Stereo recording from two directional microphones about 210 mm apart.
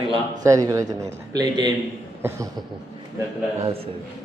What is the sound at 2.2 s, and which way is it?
Speech, 10° right (ahead or behind).